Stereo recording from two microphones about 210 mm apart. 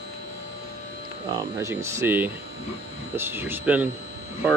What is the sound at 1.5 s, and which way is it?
Speech, 15° right (ahead or behind).